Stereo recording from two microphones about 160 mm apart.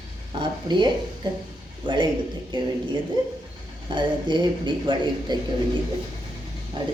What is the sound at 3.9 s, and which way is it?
Speech, 30° right (ahead or behind).